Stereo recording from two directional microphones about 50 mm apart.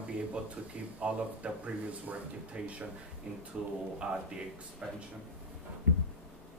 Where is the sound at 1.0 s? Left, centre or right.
Right.